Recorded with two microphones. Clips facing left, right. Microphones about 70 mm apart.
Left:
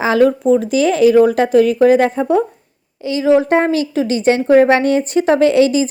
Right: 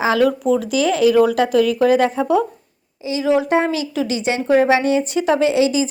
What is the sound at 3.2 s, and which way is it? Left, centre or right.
A woman's voice, left.